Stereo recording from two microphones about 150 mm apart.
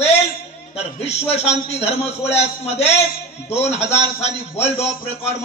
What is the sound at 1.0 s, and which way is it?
A man's voice, 45° left (ahead or behind).